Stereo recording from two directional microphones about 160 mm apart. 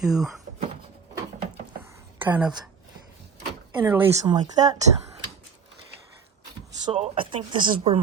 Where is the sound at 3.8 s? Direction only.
10° right (ahead or behind).